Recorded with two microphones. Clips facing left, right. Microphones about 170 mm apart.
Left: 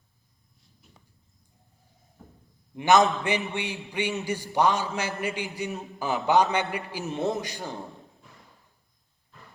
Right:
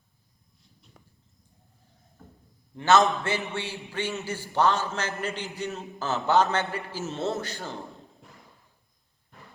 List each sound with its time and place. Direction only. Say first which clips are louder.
2.7 s a man's voice: left 1 dB; 15° left (ahead or behind)